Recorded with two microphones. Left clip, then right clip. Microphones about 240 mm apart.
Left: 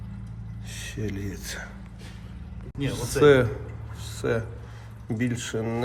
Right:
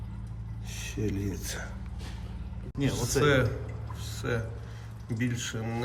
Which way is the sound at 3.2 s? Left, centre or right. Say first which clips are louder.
Left 8 dB; centre.